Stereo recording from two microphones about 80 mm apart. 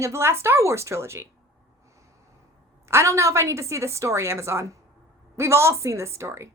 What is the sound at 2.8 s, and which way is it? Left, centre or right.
A woman's voice, right.